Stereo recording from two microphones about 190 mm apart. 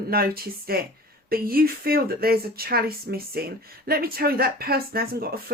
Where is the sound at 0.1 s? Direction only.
50° right (ahead or behind).